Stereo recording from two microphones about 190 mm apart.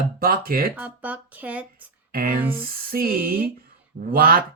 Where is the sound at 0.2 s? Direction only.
50° right (ahead or behind).